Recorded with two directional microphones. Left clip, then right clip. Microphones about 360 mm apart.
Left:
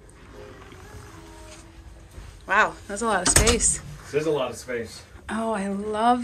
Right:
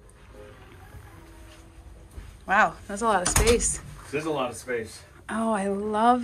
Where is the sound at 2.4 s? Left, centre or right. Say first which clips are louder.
Left 1 dB; centre.